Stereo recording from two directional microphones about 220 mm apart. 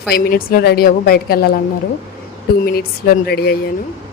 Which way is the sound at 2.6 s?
45° left (ahead or behind).